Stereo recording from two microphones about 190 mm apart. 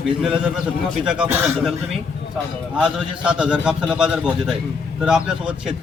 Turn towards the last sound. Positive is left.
turn(degrees=-5)  # may be behind; listen again after turning